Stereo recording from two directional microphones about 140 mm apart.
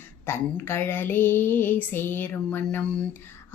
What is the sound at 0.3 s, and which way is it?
Female singing, 15° left (ahead or behind).